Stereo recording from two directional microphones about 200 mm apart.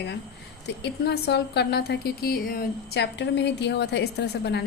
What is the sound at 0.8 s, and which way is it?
A woman's voice, 55° left (ahead or behind).